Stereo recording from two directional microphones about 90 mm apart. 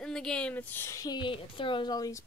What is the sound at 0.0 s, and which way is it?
Speech, 5° left (ahead or behind).